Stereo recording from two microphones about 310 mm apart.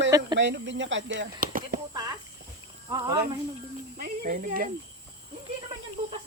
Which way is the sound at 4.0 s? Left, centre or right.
Right.